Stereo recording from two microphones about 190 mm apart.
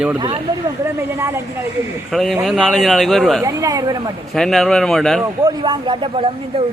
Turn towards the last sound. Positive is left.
turn(degrees=-25)  # may be behind; listen again after turning